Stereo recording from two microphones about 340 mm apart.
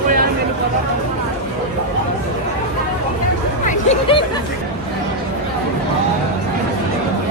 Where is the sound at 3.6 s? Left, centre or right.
Centre.